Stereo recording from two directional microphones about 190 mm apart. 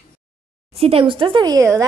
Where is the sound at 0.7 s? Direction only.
30° right (ahead or behind).